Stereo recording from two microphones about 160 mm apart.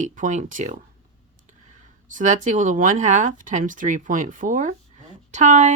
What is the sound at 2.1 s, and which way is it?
Speech, 55° right (ahead or behind).